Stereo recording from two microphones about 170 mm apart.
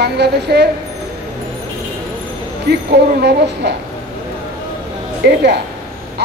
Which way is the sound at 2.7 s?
80° right.